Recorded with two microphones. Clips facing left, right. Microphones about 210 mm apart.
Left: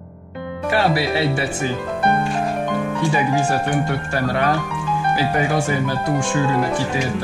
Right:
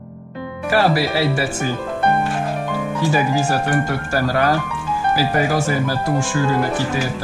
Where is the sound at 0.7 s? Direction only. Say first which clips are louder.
Right 2 dB; 25° left (ahead or behind).